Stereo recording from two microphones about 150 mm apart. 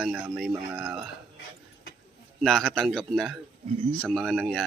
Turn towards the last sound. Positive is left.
turn(degrees=0)  # may be behind; listen again after turning